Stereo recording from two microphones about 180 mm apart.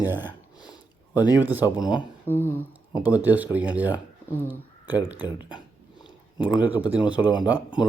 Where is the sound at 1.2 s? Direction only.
20° left (ahead or behind).